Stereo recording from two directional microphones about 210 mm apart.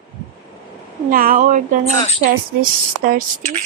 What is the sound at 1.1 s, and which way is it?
Speech, 40° right (ahead or behind).